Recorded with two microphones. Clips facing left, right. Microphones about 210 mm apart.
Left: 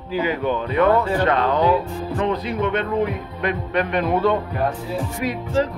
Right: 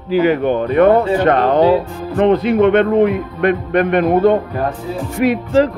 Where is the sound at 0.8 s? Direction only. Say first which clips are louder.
Right 5 dB; 20° right (ahead or behind).